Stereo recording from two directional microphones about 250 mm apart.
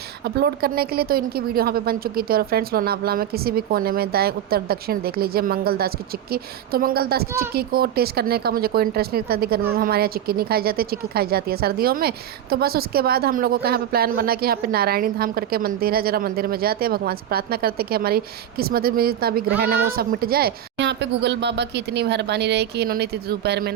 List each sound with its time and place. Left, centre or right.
0.3 s speech: right